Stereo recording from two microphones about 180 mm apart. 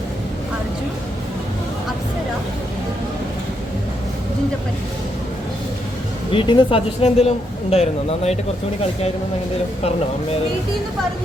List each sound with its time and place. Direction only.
6.3 s speech: 25° left (ahead or behind)